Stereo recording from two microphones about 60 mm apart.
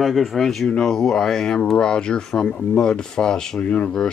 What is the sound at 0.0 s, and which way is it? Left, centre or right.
Speech, centre.